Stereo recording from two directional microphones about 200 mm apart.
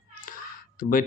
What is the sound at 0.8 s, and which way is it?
Speech, 45° left (ahead or behind).